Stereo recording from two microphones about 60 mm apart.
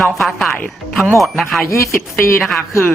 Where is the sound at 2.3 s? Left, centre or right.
Centre.